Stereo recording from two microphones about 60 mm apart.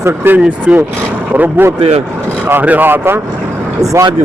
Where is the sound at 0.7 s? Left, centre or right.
Centre.